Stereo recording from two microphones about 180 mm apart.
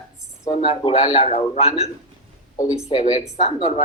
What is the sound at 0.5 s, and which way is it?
Speech, 30° left (ahead or behind).